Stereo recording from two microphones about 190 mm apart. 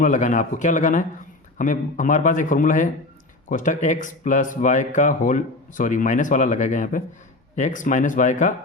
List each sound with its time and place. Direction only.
0.0 s speech: 40° left (ahead or behind)